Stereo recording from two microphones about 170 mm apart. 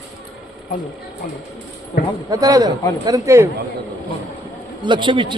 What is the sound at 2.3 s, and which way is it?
A man's voice, 20° right (ahead or behind).